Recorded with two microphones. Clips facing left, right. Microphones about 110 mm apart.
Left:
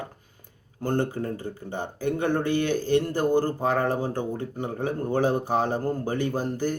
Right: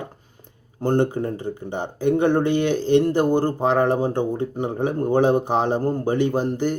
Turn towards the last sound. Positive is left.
turn(degrees=-20)  # may be behind; listen again after turning